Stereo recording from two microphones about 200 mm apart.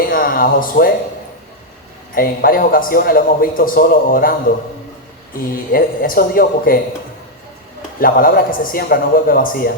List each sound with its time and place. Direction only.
0.0 s speech: 45° left (ahead or behind)
2.1 s a man's voice: 45° left (ahead or behind)
7.9 s a man's voice: 45° left (ahead or behind)